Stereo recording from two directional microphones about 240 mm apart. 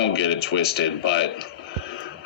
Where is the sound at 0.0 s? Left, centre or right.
Left.